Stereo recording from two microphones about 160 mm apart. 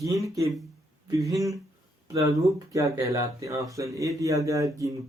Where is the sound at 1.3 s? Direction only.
20° right (ahead or behind).